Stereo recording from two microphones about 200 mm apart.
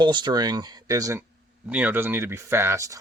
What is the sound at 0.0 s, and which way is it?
Speech, 25° right (ahead or behind).